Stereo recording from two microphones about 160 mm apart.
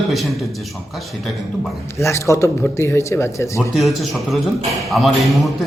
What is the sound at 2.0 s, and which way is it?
Speech, 20° left (ahead or behind).